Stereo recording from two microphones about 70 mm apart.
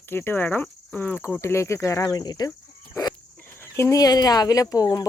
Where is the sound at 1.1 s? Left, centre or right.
Centre.